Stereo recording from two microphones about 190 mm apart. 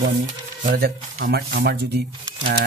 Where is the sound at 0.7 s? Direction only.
50° right (ahead or behind).